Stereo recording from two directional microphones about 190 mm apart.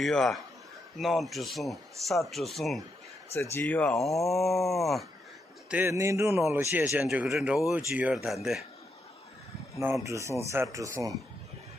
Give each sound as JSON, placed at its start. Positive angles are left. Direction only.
{"t": 0.0, "sound": "speech", "side_deg": 0}
{"t": 5.7, "sound": "speech", "side_deg": -10}
{"t": 10.0, "sound": "speech", "side_deg": -15}